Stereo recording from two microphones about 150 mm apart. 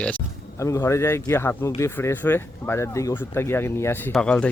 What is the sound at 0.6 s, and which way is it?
Speech, 20° left (ahead or behind).